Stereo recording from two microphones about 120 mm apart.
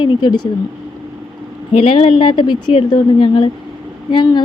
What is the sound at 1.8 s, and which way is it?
Speech, 50° left (ahead or behind).